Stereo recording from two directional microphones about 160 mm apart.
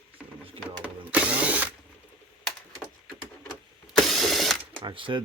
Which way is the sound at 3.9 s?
Centre (ahead or behind).